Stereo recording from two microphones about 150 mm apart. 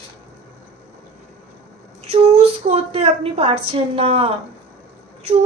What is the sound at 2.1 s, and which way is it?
A woman's voice, 45° right (ahead or behind).